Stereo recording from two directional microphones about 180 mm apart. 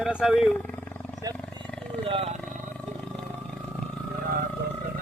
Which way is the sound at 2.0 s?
30° right (ahead or behind).